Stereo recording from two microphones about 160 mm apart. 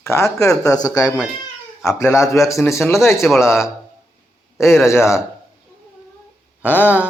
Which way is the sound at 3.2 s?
Centre (ahead or behind).